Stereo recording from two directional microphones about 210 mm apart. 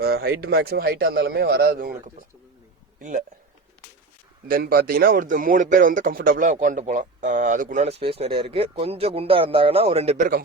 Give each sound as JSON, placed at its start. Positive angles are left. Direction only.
{"t": 0.0, "sound": "a man's voice", "side_deg": -50}
{"t": 4.4, "sound": "speech", "side_deg": -45}